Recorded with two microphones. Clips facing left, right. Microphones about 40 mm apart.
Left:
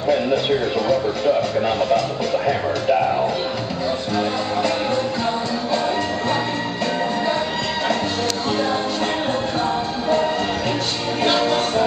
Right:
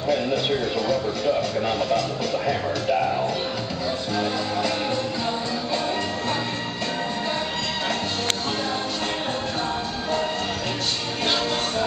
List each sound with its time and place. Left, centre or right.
0.1 s speech: centre
4.2 s music: centre
11.2 s music: centre